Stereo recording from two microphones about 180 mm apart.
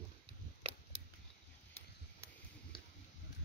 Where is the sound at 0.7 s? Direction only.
30° right (ahead or behind).